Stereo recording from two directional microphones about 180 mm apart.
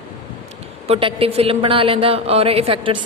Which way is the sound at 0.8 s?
35° right (ahead or behind).